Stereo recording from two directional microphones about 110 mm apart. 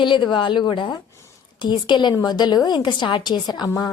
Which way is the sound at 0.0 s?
45° left (ahead or behind).